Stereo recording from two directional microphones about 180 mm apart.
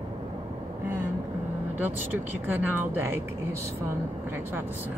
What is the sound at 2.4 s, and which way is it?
Speech, 10° right (ahead or behind).